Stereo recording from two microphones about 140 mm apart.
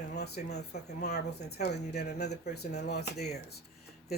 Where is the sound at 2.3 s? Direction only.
55° left (ahead or behind).